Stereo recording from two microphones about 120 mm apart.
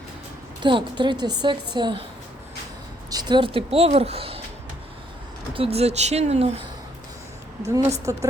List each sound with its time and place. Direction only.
0.6 s a woman's voice: 40° right (ahead or behind)
3.1 s speech: 35° right (ahead or behind); by 4.4 s 55° right (ahead or behind)
5.5 s speech: 55° right (ahead or behind)
7.6 s a woman's voice: 25° right (ahead or behind)